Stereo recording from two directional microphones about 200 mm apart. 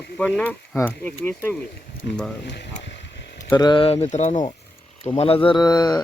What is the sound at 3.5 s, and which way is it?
Speech, 20° left (ahead or behind).